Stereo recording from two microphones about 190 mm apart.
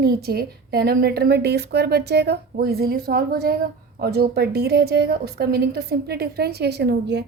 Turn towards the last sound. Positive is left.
turn(degrees=-65)  # may be behind; listen again after turning